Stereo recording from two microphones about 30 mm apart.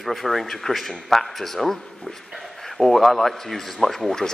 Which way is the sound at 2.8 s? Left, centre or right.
Centre.